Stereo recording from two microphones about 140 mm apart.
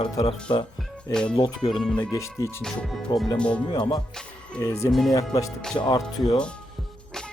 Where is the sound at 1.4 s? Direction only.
35° left (ahead or behind).